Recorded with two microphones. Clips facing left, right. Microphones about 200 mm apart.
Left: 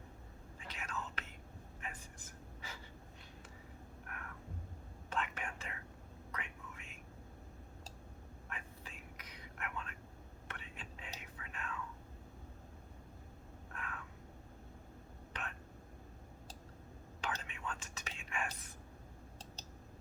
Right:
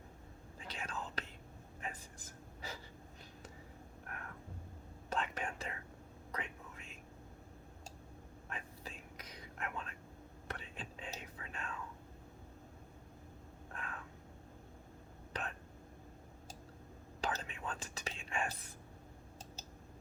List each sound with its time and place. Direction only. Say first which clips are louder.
0.7 s whispering: right 1 dB; 30° right (ahead or behind)
1.8 s a sound: right 3 dB; 35° right (ahead or behind)
5.0 s whispering: right 2 dB; 35° right (ahead or behind)
8.4 s whispering: right 3 dB; 35° right (ahead or behind)
13.7 s vehicle: right 1 dB; 35° right (ahead or behind)
15.3 s whispering: right 4 dB; 35° right (ahead or behind)
17.2 s whispering: right 3 dB; 35° right (ahead or behind)